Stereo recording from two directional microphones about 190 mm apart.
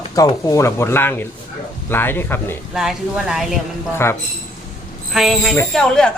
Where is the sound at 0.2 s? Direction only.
20° left (ahead or behind).